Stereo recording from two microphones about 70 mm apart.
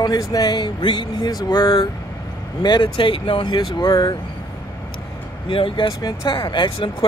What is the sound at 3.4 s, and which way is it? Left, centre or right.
Speech, left.